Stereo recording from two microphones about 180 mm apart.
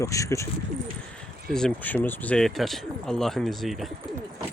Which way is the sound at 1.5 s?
5° left (ahead or behind).